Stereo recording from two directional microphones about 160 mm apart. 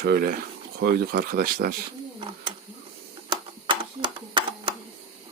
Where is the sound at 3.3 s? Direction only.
30° right (ahead or behind).